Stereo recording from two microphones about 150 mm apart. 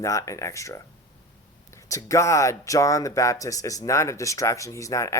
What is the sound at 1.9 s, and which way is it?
Speech, 20° left (ahead or behind).